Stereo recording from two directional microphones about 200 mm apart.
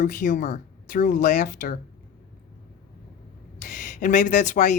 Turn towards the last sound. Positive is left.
turn(degrees=40)  # may be behind; listen again after turning